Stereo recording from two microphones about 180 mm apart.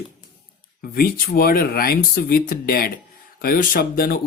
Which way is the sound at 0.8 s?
55° left (ahead or behind).